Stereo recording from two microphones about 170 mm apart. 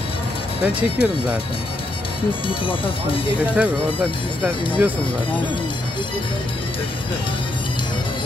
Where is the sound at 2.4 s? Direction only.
30° left (ahead or behind).